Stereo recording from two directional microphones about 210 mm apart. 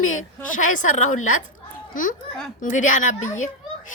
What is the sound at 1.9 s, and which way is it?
A child's voice, 40° left (ahead or behind).